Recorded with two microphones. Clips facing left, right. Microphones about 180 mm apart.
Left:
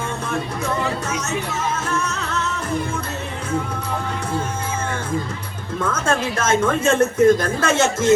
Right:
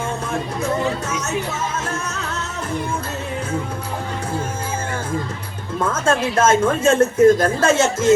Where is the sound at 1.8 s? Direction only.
45° right (ahead or behind).